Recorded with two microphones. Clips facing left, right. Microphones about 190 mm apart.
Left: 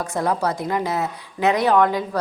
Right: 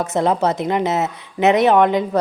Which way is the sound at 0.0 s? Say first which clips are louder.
Right 5 dB; 20° right (ahead or behind).